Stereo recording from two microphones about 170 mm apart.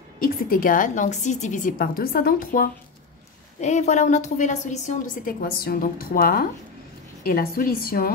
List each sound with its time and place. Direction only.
0.2 s a woman's voice: 55° left (ahead or behind)
3.6 s a woman's voice: 40° left (ahead or behind); by 8.1 s 60° left (ahead or behind)